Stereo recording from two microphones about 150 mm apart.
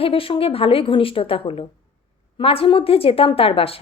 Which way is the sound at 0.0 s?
35° left (ahead or behind).